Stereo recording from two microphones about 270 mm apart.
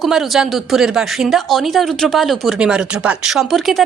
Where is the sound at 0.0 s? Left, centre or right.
Centre.